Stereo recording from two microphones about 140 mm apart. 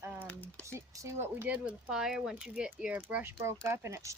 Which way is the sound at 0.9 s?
20° right (ahead or behind).